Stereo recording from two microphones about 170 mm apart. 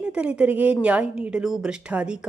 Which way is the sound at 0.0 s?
5° right (ahead or behind).